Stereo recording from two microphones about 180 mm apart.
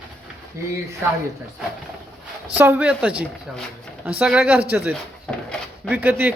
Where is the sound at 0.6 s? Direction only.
15° right (ahead or behind).